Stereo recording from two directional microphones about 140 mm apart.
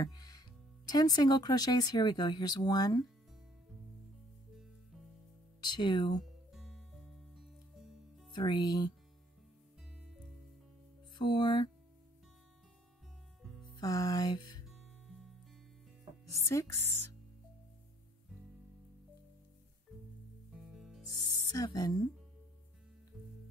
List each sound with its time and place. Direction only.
0.0 s speech: 30° left (ahead or behind)
5.6 s speech: 30° left (ahead or behind)
6.5 s music: centre (ahead or behind)
8.3 s speech: 30° left (ahead or behind)
11.1 s speech: 35° left (ahead or behind)
13.7 s music: 25° left (ahead or behind)
14.7 s music: centre (ahead or behind)
16.4 s music: 20° left (ahead or behind)
20.5 s music: 5° right (ahead or behind)
21.5 s music: 30° left (ahead or behind)
23.1 s music: 5° right (ahead or behind)